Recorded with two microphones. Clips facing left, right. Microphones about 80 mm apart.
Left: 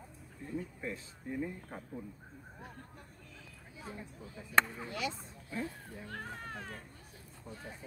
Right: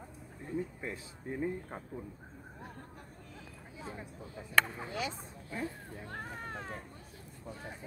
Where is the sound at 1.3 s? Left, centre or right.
Right.